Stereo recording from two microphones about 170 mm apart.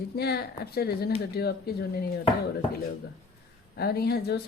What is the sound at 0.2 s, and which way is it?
Speech, 70° left (ahead or behind).